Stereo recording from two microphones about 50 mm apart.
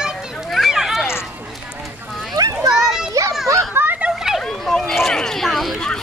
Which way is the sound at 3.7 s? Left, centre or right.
Right.